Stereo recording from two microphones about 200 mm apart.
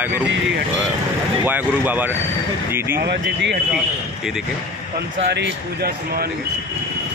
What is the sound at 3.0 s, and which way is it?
Speech, 60° right (ahead or behind).